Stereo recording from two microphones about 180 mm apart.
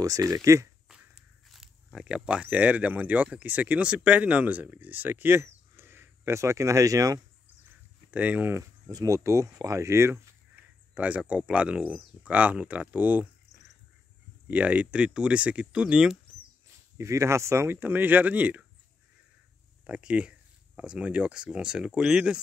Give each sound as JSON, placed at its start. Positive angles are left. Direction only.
{"t": 0.0, "sound": "speech", "side_deg": -20}
{"t": 0.8, "sound": "speech", "side_deg": -5}
{"t": 14.5, "sound": "speech", "side_deg": -10}
{"t": 16.9, "sound": "speech", "side_deg": -15}
{"t": 19.9, "sound": "speech", "side_deg": -5}